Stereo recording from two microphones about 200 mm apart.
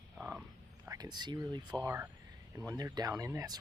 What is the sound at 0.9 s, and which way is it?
Speech, 20° right (ahead or behind).